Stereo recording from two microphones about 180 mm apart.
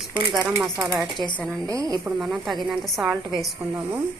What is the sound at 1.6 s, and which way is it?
Speech, 20° right (ahead or behind).